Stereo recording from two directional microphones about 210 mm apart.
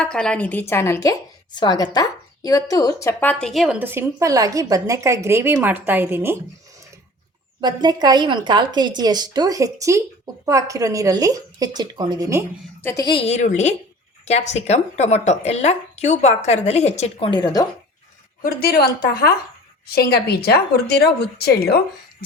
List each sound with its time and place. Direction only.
0.0 s a woman's voice: 5° left (ahead or behind)
7.6 s a woman's voice: 20° right (ahead or behind)
12.8 s a woman's voice: 15° left (ahead or behind)
18.4 s speech: 45° left (ahead or behind)